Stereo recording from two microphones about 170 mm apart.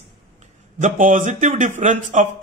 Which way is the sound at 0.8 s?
50° right (ahead or behind).